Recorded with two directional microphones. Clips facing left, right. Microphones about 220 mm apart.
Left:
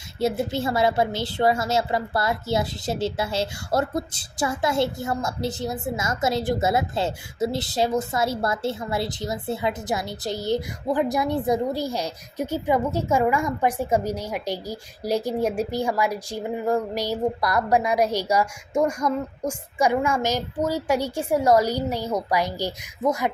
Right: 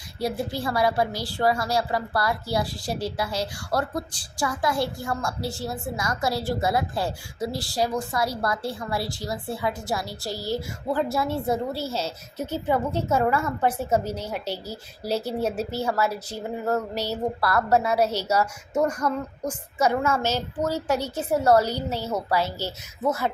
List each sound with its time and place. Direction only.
0.2 s a woman's voice: 25° left (ahead or behind)